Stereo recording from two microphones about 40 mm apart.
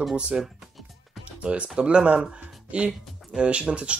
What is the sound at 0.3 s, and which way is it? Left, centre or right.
Speech, right.